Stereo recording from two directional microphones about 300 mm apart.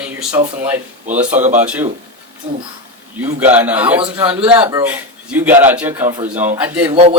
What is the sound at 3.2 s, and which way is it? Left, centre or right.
Speech, centre.